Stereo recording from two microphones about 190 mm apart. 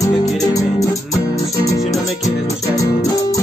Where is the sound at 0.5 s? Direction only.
15° left (ahead or behind).